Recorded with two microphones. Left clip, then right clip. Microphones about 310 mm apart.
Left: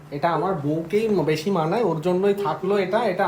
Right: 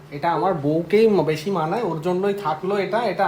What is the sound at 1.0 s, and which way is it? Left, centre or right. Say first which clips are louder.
Speech: right 3 dB; centre.